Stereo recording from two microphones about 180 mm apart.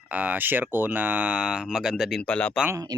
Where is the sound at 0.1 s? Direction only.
10° right (ahead or behind).